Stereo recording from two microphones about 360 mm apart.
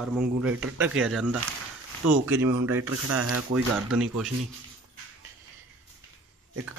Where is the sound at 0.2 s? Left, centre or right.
Centre.